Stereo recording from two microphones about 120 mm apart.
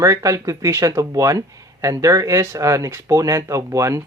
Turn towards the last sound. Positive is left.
turn(degrees=-25)  # may be behind; listen again after turning